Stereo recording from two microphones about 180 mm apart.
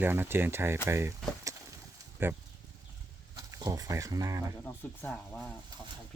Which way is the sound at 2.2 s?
10° right (ahead or behind).